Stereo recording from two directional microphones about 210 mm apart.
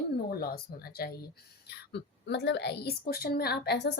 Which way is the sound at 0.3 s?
45° left (ahead or behind).